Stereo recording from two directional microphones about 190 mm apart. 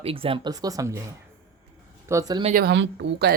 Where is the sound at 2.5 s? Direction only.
65° right (ahead or behind).